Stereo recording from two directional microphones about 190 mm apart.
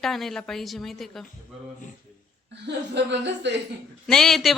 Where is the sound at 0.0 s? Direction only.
Centre (ahead or behind).